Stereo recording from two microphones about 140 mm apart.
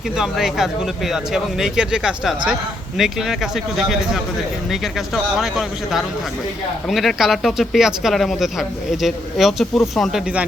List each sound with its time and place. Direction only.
0.2 s speech: centre (ahead or behind)